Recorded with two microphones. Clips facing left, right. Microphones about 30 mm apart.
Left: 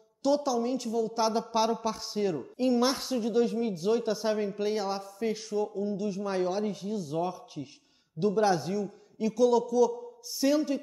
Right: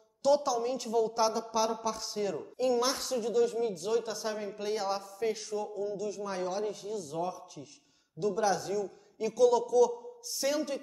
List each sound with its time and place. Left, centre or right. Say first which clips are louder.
0.2 s a woman's voice: even; centre
1.2 s a man's voice: left 3 dB; left
5.8 s a man's voice: left 3 dB; left
8.8 s a man's voice: left 3 dB; centre